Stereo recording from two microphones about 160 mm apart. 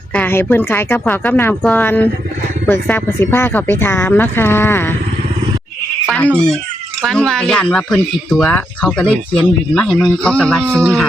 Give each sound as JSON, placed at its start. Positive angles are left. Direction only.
{"t": 0.1, "sound": "speech", "side_deg": 10}
{"t": 6.1, "sound": "speech", "side_deg": 5}
{"t": 10.6, "sound": "speech", "side_deg": -15}